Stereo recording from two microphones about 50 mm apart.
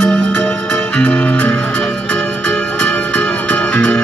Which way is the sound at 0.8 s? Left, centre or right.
Left.